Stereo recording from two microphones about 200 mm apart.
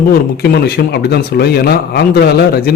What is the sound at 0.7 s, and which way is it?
A man's voice, 55° left (ahead or behind).